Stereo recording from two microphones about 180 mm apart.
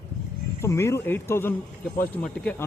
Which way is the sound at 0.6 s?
15° left (ahead or behind).